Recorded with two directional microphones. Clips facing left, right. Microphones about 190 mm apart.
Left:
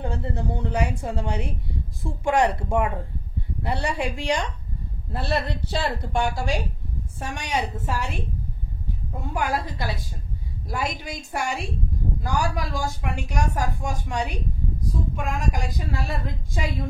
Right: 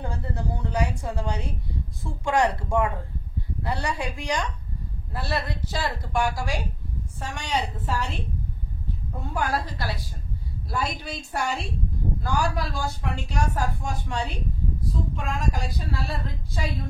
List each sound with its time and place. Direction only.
0.0 s a woman's voice: 25° left (ahead or behind)
7.2 s a woman's voice: 20° left (ahead or behind)
9.3 s a woman's voice: 15° left (ahead or behind)